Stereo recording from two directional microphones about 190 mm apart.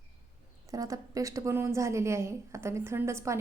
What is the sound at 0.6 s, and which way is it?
A woman's voice, 20° right (ahead or behind).